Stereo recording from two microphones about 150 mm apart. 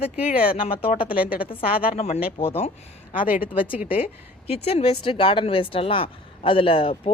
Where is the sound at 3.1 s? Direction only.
65° left (ahead or behind).